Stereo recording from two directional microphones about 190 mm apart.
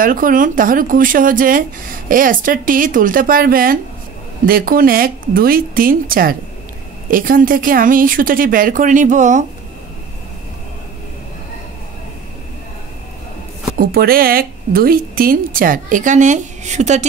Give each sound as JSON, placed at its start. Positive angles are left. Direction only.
{"t": 0.0, "sound": "a woman's voice", "side_deg": -45}
{"t": 13.7, "sound": "a woman's voice", "side_deg": -50}